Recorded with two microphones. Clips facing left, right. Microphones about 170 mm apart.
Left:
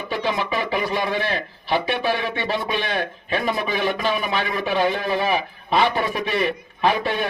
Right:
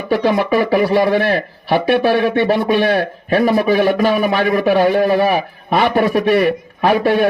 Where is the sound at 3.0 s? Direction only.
45° right (ahead or behind).